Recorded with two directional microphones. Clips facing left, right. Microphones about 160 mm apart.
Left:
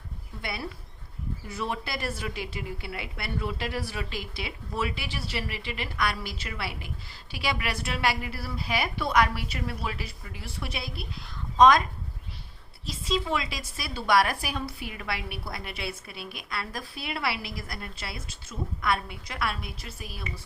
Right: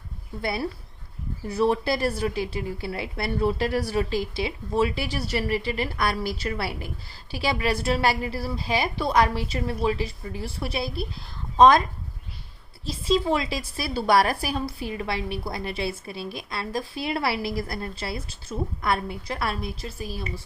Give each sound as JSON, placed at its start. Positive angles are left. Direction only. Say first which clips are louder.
{"t": 1.5, "sound": "a woman's voice", "louder": "right 11 dB", "side_deg": -35}
{"t": 12.9, "sound": "a woman's voice", "louder": "right 6 dB", "side_deg": -30}